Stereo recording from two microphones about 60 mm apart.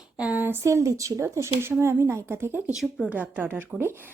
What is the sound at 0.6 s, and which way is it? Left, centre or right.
Speech, right.